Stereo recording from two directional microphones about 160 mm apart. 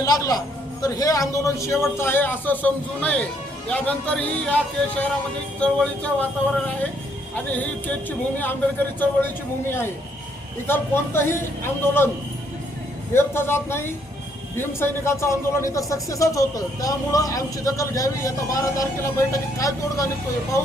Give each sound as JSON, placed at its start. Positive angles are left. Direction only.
{"t": 0.0, "sound": "a man's voice", "side_deg": 25}
{"t": 7.3, "sound": "a man's voice", "side_deg": 10}
{"t": 9.0, "sound": "a man's voice", "side_deg": 15}
{"t": 13.1, "sound": "a man's voice", "side_deg": 15}